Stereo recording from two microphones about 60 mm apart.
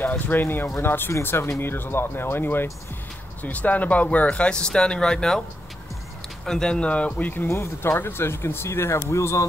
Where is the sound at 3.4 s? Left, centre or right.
Left; by 5.4 s centre.